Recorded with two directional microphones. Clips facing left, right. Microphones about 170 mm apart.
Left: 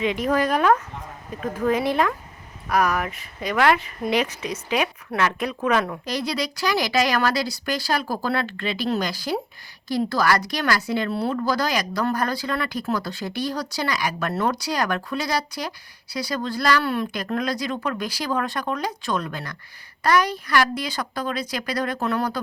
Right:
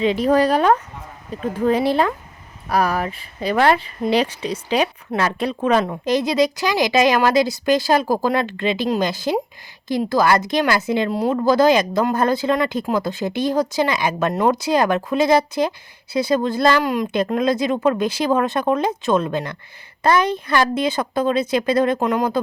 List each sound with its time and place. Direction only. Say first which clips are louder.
0.0 s a woman's voice: right 6 dB; 30° right (ahead or behind)